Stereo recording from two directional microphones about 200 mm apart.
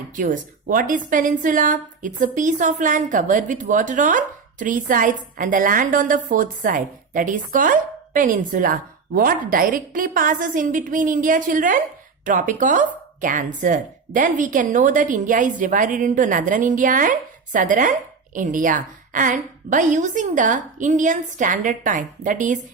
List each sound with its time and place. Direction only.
0.2 s a woman's voice: 40° right (ahead or behind)